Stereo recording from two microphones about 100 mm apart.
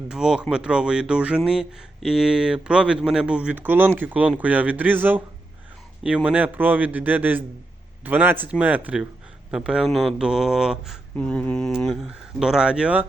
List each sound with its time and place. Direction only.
0.1 s speech: 5° right (ahead or behind)
11.2 s speech: 10° left (ahead or behind)
11.8 s speech: 5° right (ahead or behind)